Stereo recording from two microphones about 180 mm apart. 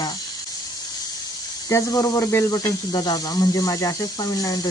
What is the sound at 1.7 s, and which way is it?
Speech, 20° left (ahead or behind).